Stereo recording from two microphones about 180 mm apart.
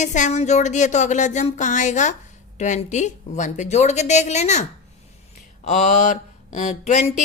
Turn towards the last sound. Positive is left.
turn(degrees=40)  # may be behind; listen again after turning